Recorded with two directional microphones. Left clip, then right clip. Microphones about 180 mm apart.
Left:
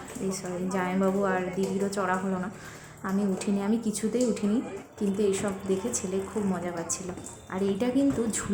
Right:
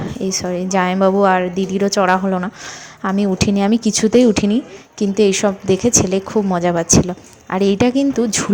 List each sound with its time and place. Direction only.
0.3 s a woman's voice: 40° right (ahead or behind)